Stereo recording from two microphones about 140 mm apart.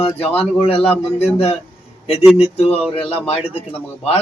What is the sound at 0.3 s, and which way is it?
Speech, 45° left (ahead or behind).